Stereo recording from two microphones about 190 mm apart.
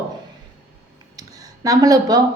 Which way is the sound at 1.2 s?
20° right (ahead or behind).